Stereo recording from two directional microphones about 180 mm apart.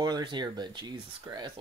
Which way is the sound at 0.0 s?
25° right (ahead or behind).